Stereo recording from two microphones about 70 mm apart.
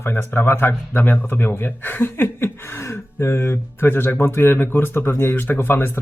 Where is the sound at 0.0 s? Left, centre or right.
Left.